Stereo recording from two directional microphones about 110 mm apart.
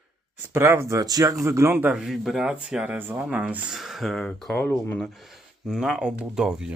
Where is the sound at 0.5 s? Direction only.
20° right (ahead or behind).